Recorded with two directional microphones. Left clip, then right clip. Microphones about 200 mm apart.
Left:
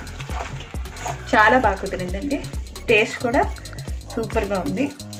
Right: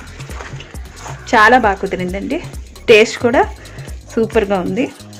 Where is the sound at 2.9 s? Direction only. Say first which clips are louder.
Right 9 dB; 55° right (ahead or behind).